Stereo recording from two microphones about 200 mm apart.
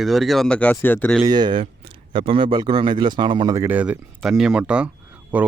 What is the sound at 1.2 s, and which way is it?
Speech, 20° right (ahead or behind).